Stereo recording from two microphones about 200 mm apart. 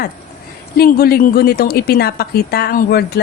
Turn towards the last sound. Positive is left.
turn(degrees=50)  # may be behind; listen again after turning